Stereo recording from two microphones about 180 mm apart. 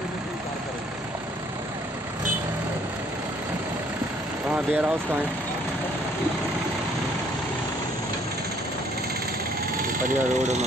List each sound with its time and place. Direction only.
4.5 s speech: 10° right (ahead or behind)
9.8 s speech: 45° right (ahead or behind)